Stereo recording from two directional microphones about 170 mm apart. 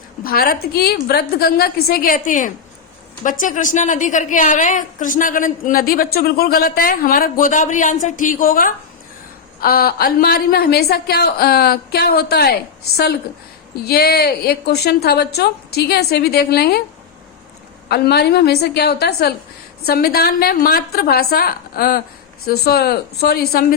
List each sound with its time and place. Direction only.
0.3 s a woman's voice: 65° left (ahead or behind)
17.8 s a woman's voice: 70° left (ahead or behind)